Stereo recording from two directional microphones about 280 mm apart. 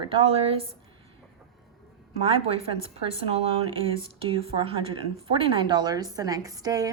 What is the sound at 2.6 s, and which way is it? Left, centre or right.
A woman's voice, centre.